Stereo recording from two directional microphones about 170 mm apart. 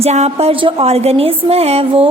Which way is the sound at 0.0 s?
40° right (ahead or behind).